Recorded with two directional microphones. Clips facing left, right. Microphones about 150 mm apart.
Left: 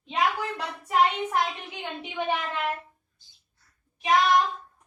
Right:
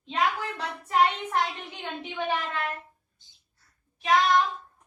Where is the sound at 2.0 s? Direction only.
15° left (ahead or behind).